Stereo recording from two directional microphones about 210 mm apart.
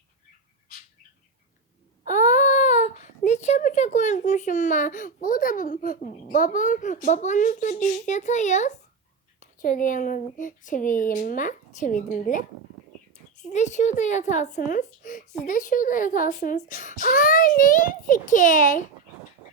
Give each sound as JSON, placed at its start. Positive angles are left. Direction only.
{"t": 2.0, "sound": "a woman's voice", "side_deg": 35}
{"t": 13.5, "sound": "a woman's voice", "side_deg": 35}